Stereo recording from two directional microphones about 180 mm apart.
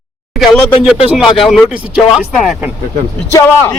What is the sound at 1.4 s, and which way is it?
Speech, centre (ahead or behind).